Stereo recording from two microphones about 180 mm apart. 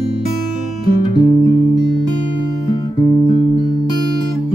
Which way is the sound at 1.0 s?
20° left (ahead or behind).